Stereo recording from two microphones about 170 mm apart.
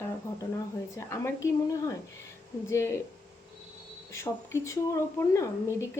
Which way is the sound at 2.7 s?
15° left (ahead or behind).